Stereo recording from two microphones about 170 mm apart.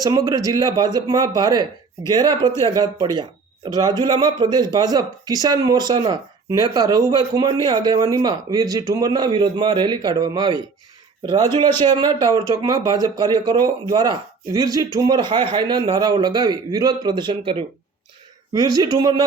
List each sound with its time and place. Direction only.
0.0 s speech: 20° right (ahead or behind)
11.8 s speech: 25° right (ahead or behind)